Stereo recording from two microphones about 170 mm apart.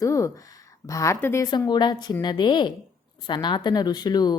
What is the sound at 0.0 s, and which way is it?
A woman's voice, 20° left (ahead or behind).